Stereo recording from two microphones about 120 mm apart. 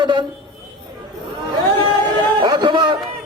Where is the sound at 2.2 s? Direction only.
40° right (ahead or behind).